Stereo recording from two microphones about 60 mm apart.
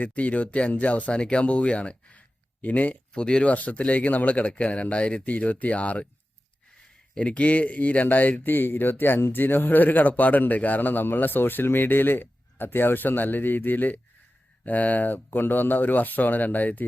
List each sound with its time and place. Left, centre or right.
0.0 s speech: left
7.2 s speech: left